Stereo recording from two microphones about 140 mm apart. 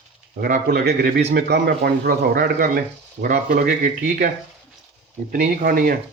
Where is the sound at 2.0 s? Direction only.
90° right.